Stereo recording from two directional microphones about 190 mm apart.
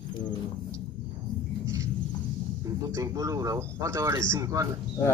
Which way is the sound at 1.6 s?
15° right (ahead or behind).